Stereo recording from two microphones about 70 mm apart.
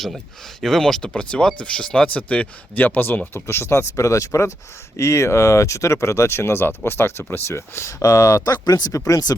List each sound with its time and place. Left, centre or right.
0.6 s speech: centre; by 8.5 s left
8.5 s speech: left
8.9 s speech: left